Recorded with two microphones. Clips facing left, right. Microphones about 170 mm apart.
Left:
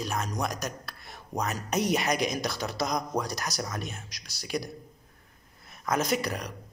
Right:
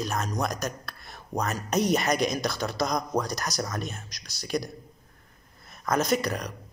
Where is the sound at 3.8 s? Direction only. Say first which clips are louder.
Right 3 dB; 40° right (ahead or behind).